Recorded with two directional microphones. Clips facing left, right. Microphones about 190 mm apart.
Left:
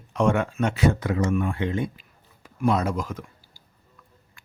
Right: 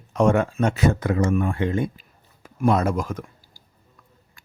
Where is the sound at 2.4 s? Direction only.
50° right (ahead or behind).